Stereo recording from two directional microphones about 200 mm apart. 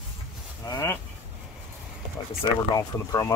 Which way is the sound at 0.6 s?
15° left (ahead or behind).